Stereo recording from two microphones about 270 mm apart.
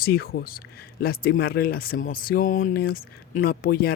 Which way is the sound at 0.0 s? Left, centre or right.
Left.